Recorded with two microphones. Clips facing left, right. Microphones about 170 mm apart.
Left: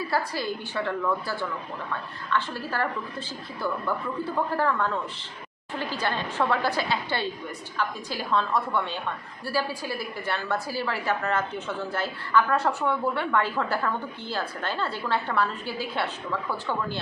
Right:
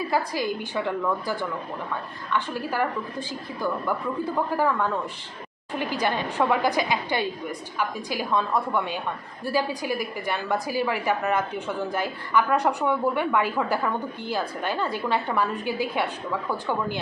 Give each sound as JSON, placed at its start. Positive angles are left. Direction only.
{"t": 0.1, "sound": "a woman's voice", "side_deg": -15}